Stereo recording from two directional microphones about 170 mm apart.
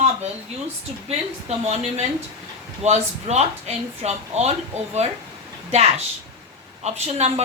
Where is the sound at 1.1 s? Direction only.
40° right (ahead or behind).